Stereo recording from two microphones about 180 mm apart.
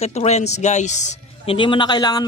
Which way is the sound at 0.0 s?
35° left (ahead or behind).